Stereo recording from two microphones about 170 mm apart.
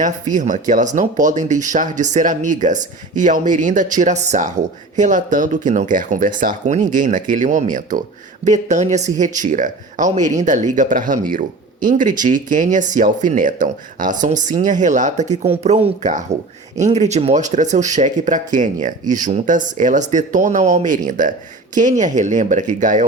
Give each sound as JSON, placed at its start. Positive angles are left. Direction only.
{"t": 0.0, "sound": "speech", "side_deg": -50}